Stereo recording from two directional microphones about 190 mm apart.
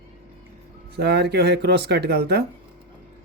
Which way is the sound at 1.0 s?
60° right (ahead or behind).